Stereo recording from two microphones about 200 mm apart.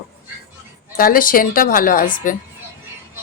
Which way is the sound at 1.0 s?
45° left (ahead or behind).